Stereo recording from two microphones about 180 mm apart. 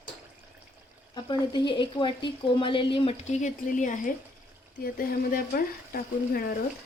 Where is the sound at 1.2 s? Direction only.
25° left (ahead or behind); by 6.4 s 55° left (ahead or behind).